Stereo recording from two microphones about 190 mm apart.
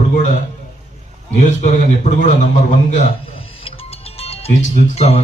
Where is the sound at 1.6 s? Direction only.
40° left (ahead or behind).